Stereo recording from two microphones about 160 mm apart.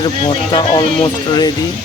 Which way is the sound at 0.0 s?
30° left (ahead or behind).